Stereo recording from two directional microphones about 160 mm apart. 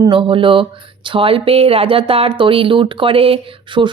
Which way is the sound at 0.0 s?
30° right (ahead or behind).